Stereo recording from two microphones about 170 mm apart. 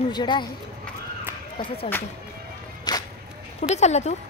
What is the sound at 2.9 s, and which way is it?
Music, 25° left (ahead or behind).